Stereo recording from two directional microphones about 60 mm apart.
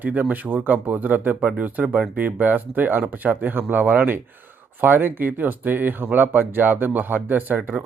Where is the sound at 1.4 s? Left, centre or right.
Centre.